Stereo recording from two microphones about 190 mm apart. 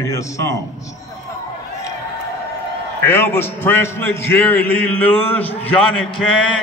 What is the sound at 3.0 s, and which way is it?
A man's voice, 10° left (ahead or behind).